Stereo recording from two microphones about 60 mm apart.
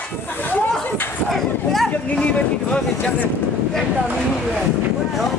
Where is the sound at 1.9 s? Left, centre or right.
Left.